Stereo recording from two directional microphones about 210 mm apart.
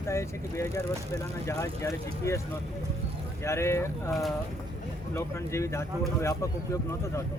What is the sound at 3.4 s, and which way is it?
Speech, 15° left (ahead or behind).